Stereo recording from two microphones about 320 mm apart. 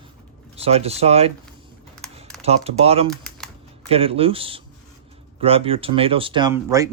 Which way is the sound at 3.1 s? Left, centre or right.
Centre.